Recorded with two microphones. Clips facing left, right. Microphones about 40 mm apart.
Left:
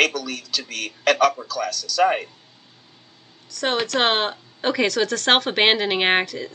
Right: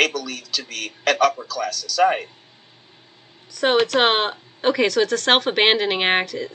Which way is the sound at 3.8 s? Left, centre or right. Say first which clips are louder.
Right 2 dB; centre.